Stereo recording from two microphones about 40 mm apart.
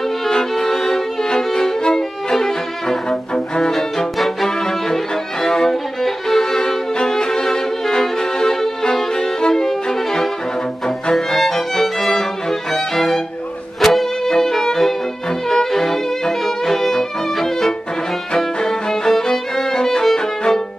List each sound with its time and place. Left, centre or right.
0.3 s violin: centre
3.3 s music: centre
3.7 s violin: centre
11.1 s music: centre
12.7 s violin: centre
13.7 s music: centre
14.3 s violin: centre